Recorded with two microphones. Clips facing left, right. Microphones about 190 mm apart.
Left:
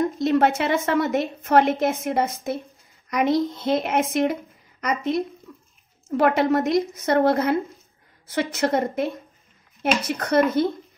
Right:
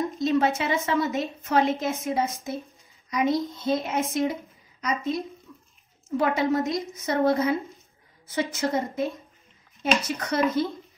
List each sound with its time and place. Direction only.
0.2 s a woman's voice: 60° left (ahead or behind)
5.5 s a sound: 70° left (ahead or behind)
6.0 s a child's voice: 70° left (ahead or behind)
10.0 s a woman's voice: 60° left (ahead or behind)